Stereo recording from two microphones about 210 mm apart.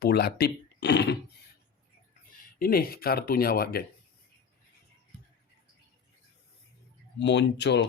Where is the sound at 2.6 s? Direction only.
45° left (ahead or behind).